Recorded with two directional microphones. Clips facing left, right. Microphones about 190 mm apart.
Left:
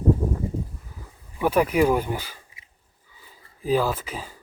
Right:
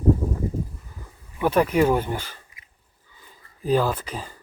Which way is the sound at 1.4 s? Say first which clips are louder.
Right 1 dB; 10° left (ahead or behind).